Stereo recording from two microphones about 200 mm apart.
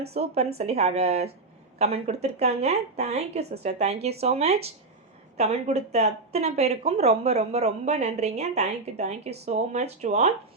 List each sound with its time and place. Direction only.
0.1 s speech: 30° right (ahead or behind)